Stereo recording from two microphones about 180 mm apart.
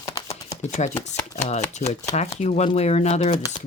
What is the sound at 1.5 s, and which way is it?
Speech, 40° left (ahead or behind).